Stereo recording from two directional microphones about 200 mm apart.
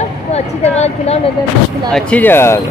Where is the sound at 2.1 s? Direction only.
10° left (ahead or behind).